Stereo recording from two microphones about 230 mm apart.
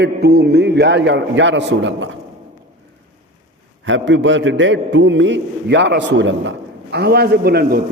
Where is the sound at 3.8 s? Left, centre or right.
Right.